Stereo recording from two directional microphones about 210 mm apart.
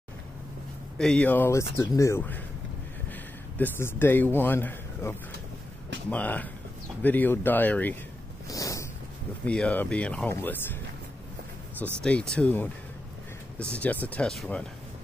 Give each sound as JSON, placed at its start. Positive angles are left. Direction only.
{"t": 0.9, "sound": "a man's voice", "side_deg": 5}
{"t": 8.5, "sound": "snort", "side_deg": 15}
{"t": 9.5, "sound": "speech", "side_deg": 5}
{"t": 12.0, "sound": "speech", "side_deg": 5}
{"t": 13.7, "sound": "speech", "side_deg": 5}